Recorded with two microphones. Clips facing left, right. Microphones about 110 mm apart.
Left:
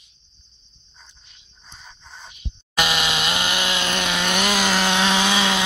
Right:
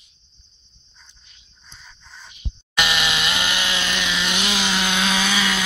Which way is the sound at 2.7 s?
40° left (ahead or behind).